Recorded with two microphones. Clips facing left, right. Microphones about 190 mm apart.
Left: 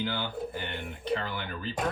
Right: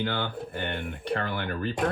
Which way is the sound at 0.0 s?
60° right (ahead or behind).